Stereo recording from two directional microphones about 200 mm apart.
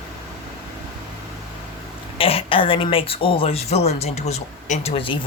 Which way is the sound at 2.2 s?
30° left (ahead or behind).